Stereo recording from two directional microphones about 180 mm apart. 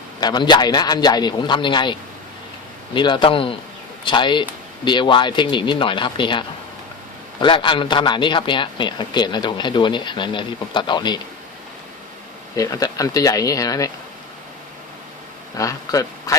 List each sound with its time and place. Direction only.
0.2 s a man's voice: 25° left (ahead or behind)
12.5 s a man's voice: 20° left (ahead or behind)
15.5 s a man's voice: 20° left (ahead or behind)